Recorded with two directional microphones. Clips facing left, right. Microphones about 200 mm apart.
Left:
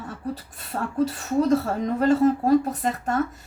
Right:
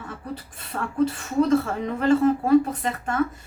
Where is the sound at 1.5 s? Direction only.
40° left (ahead or behind).